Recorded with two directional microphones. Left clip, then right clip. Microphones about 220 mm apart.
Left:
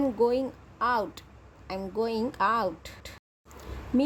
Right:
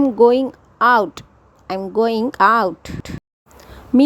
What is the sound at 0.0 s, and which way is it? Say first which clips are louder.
Speech: right 12 dB; 30° right (ahead or behind).